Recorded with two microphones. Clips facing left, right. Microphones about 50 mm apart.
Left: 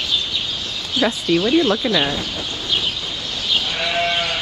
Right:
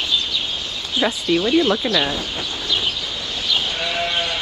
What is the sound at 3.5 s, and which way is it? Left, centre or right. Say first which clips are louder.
Sheep: left 2 dB; left.